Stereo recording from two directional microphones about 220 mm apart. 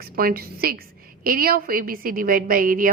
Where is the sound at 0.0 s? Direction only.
45° right (ahead or behind).